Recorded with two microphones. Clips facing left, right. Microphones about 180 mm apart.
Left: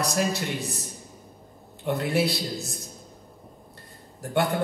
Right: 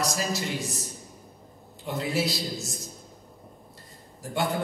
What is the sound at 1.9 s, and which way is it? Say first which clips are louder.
Speech: left 5 dB; 60° left (ahead or behind).